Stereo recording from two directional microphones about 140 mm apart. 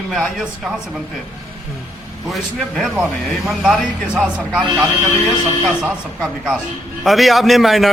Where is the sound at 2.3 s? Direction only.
Centre (ahead or behind).